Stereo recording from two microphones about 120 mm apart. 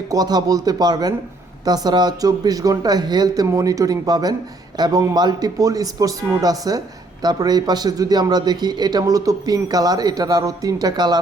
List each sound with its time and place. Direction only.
0.1 s a man's voice: 35° right (ahead or behind)